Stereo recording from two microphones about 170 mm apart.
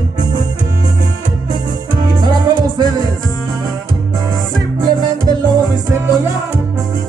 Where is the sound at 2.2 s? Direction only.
25° right (ahead or behind).